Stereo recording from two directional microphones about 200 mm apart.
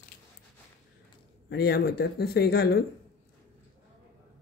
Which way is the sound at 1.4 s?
55° left (ahead or behind).